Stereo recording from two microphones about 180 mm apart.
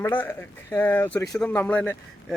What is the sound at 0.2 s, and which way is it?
A man's voice, 10° left (ahead or behind).